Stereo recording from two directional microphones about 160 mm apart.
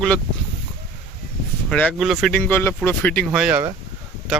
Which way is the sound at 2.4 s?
10° left (ahead or behind).